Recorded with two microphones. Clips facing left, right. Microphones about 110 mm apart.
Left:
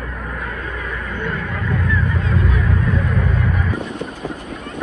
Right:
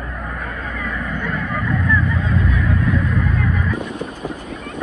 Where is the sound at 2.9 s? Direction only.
70° left (ahead or behind).